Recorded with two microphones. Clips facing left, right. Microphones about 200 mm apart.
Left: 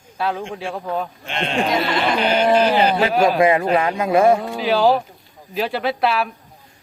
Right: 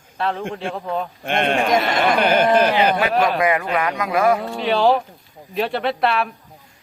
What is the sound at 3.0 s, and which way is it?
Speech, 25° left (ahead or behind).